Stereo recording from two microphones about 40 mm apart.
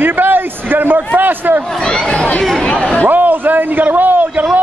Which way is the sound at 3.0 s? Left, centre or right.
Right.